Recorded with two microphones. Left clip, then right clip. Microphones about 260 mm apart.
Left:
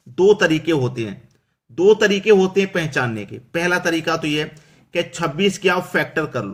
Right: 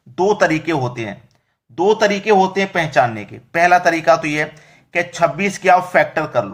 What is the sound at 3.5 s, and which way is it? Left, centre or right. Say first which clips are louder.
Speech: right 7 dB; centre.